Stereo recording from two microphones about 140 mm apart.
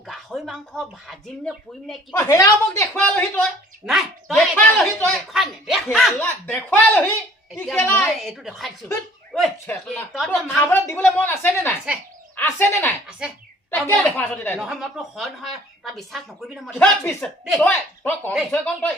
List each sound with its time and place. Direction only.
0.1 s speech: centre (ahead or behind)
2.1 s a woman's voice: 20° left (ahead or behind)
2.9 s a woman's voice: 10° left (ahead or behind)
3.8 s speech: centre (ahead or behind)
4.5 s a woman's voice: 10° left (ahead or behind)
5.3 s speech: centre (ahead or behind)
6.1 s a woman's voice: 15° left (ahead or behind)
8.2 s speech: centre (ahead or behind)
10.5 s a woman's voice: 10° left (ahead or behind)
13.1 s speech: 5° right (ahead or behind)
13.7 s a woman's voice: 15° left (ahead or behind)
14.6 s speech: centre (ahead or behind)
16.6 s a woman's voice: 10° left (ahead or behind)